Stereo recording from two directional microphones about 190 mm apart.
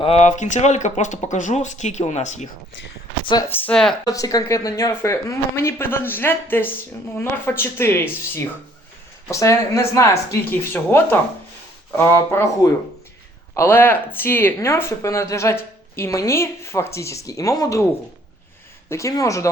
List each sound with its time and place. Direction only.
0.0 s speech: 35° left (ahead or behind)
3.5 s speech: 5° left (ahead or behind)
4.0 s speech: 20° left (ahead or behind)
9.3 s speech: 15° left (ahead or behind)
13.5 s speech: 15° left (ahead or behind)
18.9 s speech: 15° left (ahead or behind)